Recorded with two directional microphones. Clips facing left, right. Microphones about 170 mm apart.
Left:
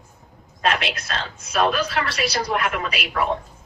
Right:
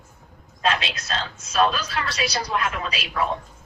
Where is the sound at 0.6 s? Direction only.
60° left (ahead or behind).